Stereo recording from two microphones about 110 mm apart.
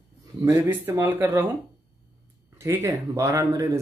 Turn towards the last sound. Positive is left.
turn(degrees=-30)  # may be behind; listen again after turning